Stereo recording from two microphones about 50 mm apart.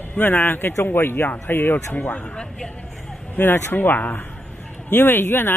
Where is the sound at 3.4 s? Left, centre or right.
Left.